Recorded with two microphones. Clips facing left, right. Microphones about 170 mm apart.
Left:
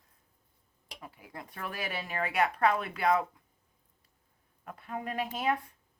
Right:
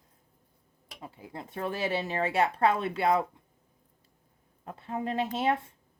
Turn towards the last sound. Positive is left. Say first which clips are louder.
# right 3 dB
turn(degrees=-25)  # may be behind; listen again after turning